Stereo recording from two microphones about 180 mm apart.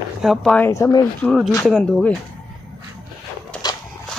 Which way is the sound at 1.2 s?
Centre (ahead or behind).